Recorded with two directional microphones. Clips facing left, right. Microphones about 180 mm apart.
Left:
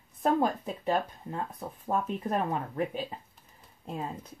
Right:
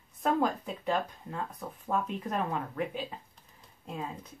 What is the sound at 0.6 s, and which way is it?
Speech, 25° left (ahead or behind).